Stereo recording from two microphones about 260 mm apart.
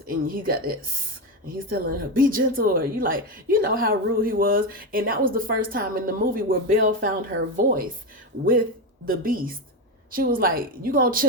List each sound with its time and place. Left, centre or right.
0.3 s a woman's voice: right
9.0 s a woman's voice: right